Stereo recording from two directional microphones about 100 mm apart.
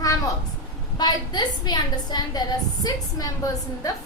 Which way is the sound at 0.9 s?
45° left (ahead or behind).